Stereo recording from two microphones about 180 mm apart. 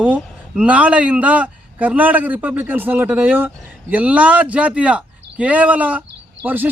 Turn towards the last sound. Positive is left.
turn(degrees=-10)  # may be behind; listen again after turning